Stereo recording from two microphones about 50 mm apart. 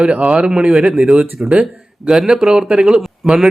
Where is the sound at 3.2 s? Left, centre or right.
Centre.